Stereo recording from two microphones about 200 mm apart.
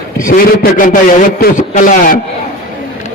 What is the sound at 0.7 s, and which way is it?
A man's voice, 40° left (ahead or behind).